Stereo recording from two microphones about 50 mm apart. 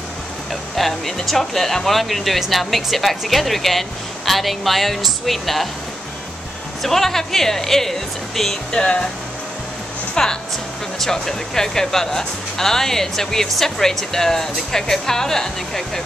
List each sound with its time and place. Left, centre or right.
0.5 s speech: centre
6.8 s speech: centre
8.7 s speech: left
10.2 s speech: centre